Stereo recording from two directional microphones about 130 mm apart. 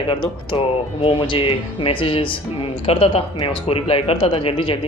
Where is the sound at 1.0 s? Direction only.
40° left (ahead or behind).